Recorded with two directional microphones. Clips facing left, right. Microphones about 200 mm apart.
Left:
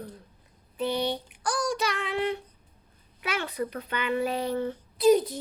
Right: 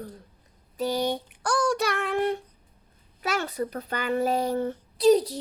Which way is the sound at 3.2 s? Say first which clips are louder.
Right 2 dB; 40° right (ahead or behind).